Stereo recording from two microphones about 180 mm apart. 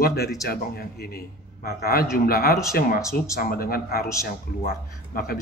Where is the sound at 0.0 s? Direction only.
60° left (ahead or behind).